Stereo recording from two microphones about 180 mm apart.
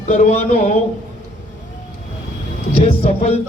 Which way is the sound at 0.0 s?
35° left (ahead or behind).